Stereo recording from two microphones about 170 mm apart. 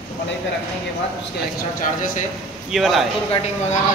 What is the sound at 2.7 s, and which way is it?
Speech, centre (ahead or behind).